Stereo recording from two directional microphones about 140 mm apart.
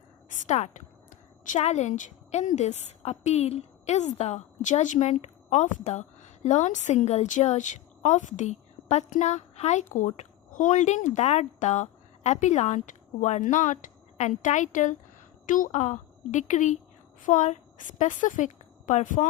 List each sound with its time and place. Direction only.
0.3 s a woman's voice: 60° left (ahead or behind)